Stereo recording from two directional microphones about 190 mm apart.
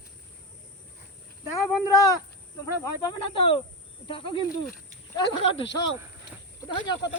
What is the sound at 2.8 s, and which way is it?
Speech, 25° left (ahead or behind).